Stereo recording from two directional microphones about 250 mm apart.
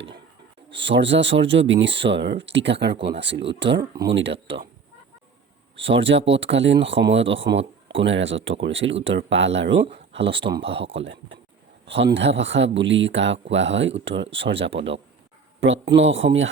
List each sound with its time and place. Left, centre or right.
0.7 s speech: right
5.7 s speech: right
10.2 s speech: right
10.8 s speech: right